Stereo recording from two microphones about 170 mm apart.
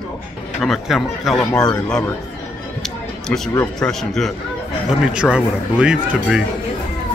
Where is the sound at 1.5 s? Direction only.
20° left (ahead or behind).